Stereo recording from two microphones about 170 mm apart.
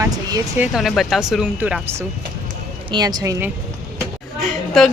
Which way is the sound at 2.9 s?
25° right (ahead or behind).